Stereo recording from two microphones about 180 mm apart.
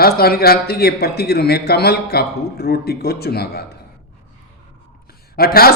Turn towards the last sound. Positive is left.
turn(degrees=55)  # may be behind; listen again after turning